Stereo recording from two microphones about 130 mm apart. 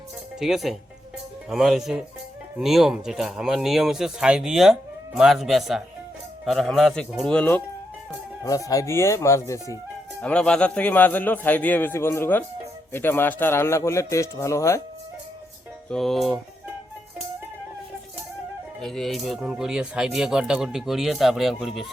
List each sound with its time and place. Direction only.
0.3 s speech: centre (ahead or behind)
8.4 s speech: 25° left (ahead or behind)
10.2 s speech: 10° left (ahead or behind)
15.9 s speech: centre (ahead or behind)
18.8 s speech: 5° left (ahead or behind)